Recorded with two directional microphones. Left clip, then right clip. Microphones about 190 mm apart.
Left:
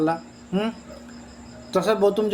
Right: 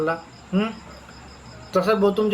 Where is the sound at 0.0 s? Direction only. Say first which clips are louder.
Left 1 dB; 45° left (ahead or behind).